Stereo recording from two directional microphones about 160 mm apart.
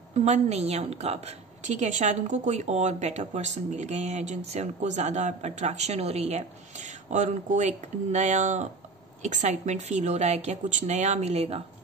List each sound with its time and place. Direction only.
0.1 s a woman's voice: 45° right (ahead or behind)